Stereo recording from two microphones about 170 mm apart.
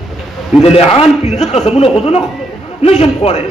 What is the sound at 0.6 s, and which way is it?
A man's voice, 35° left (ahead or behind).